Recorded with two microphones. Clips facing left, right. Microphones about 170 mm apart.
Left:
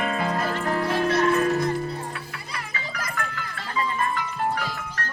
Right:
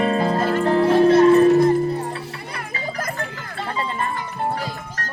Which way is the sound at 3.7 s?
30° right (ahead or behind).